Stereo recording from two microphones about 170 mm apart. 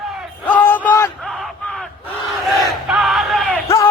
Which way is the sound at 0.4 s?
10° left (ahead or behind).